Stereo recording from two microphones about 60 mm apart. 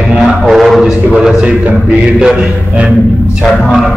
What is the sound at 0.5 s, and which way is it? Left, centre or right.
Music, centre.